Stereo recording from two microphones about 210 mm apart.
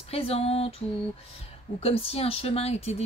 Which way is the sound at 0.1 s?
30° left (ahead or behind).